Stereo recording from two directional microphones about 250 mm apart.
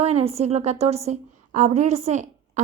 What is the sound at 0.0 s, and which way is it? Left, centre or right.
A woman's voice, right.